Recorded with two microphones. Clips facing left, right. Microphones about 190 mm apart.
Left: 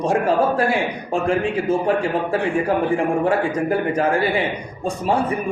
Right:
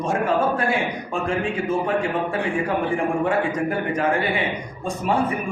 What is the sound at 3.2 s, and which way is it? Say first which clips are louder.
A man's voice: left 3 dB; 35° left (ahead or behind).